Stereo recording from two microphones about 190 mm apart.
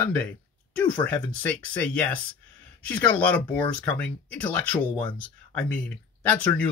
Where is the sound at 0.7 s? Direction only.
5° left (ahead or behind).